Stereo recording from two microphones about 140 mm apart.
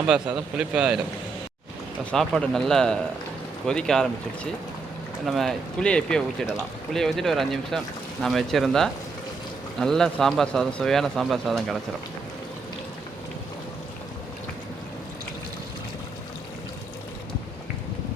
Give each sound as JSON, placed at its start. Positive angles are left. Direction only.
{"t": 0.1, "sound": "speech", "side_deg": -5}
{"t": 2.0, "sound": "speech", "side_deg": 5}
{"t": 5.2, "sound": "speech", "side_deg": 0}